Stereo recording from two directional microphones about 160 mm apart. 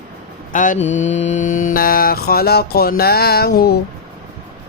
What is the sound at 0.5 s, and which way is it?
Mantra, 55° left (ahead or behind).